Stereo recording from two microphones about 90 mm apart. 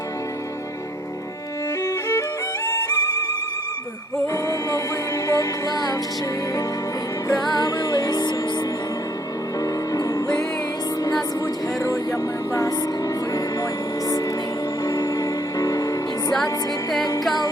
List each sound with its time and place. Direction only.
1.8 s music: 30° left (ahead or behind)
4.4 s music: 35° left (ahead or behind)
7.3 s music: 45° left (ahead or behind)
9.6 s music: 40° left (ahead or behind)
11.8 s speech: 35° left (ahead or behind)
14.8 s music: 40° left (ahead or behind)